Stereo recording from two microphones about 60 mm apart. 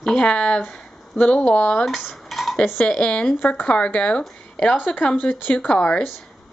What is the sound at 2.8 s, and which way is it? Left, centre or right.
Speech, centre.